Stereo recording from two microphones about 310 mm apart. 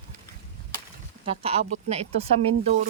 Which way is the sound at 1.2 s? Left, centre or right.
Centre.